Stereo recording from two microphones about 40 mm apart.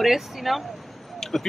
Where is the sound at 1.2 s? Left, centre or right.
Centre.